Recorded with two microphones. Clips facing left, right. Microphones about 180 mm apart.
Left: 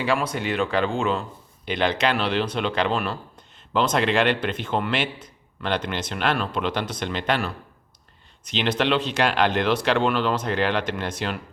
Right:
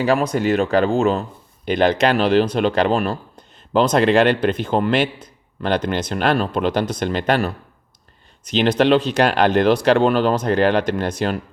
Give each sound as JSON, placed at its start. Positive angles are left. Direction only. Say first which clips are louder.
{"t": 0.0, "sound": "speech", "louder": "right 7 dB", "side_deg": -40}